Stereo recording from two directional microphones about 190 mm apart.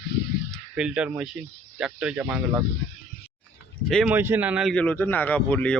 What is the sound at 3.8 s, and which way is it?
A man's voice, 5° right (ahead or behind).